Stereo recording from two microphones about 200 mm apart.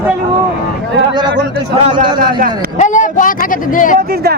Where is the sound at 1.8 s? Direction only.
25° right (ahead or behind).